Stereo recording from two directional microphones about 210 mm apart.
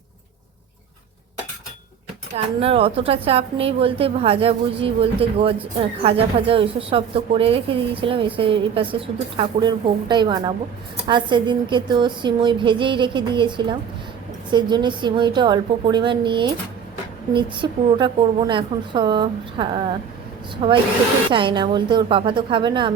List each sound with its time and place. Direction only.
2.3 s a woman's voice: 25° right (ahead or behind)